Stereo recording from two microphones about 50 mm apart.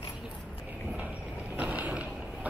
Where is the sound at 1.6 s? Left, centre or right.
Right.